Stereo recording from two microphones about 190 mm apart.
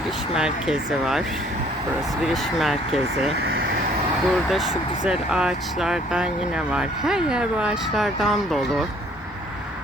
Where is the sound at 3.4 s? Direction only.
55° right (ahead or behind).